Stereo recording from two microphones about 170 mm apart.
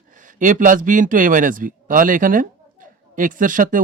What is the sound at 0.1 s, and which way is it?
Speech, 50° right (ahead or behind).